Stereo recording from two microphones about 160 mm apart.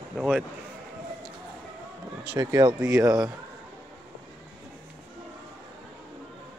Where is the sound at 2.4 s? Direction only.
25° right (ahead or behind).